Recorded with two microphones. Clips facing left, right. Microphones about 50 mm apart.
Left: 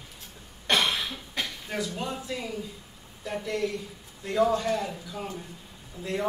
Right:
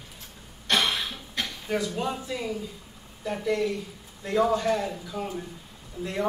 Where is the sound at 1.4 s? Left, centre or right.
Centre.